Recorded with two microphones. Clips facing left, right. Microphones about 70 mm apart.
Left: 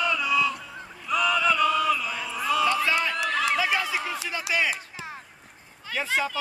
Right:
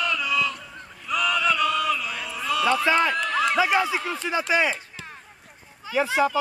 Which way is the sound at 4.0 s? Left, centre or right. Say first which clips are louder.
Right 2 dB; centre.